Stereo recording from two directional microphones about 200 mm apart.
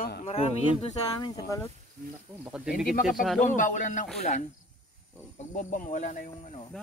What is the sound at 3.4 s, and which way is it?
Speech, 40° left (ahead or behind).